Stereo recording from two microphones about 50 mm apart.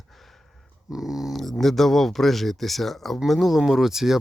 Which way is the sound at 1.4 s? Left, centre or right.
Centre.